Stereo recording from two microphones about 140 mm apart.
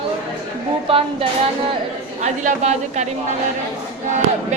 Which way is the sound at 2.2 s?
55° right (ahead or behind).